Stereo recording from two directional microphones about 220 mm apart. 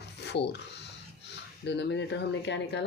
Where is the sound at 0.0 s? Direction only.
50° left (ahead or behind).